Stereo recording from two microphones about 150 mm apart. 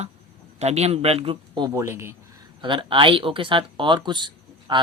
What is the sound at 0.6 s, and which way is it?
Speech, 45° right (ahead or behind).